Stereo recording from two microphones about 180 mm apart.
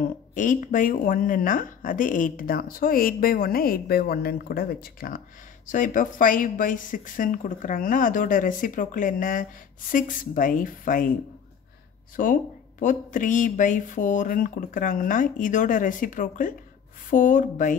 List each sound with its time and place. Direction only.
0.0 s speech: 45° left (ahead or behind)
12.2 s speech: 45° left (ahead or behind)